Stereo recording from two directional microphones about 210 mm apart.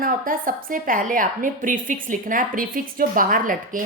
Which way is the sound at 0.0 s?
40° right (ahead or behind).